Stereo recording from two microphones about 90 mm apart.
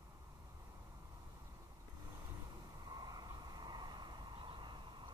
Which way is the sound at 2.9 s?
50° right (ahead or behind).